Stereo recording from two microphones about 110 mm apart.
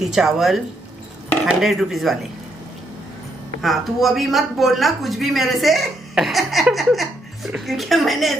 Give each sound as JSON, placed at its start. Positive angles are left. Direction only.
{"t": 0.0, "sound": "speech", "side_deg": -5}
{"t": 3.6, "sound": "speech", "side_deg": 0}